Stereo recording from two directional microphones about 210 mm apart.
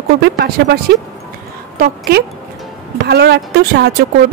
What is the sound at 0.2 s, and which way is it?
Speech, 50° right (ahead or behind).